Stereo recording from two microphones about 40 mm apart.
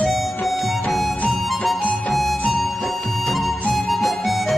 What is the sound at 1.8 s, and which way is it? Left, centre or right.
Harmonica, left.